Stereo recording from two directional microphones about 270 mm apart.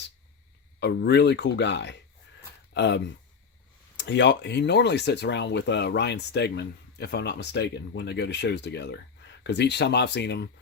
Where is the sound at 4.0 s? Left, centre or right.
Left.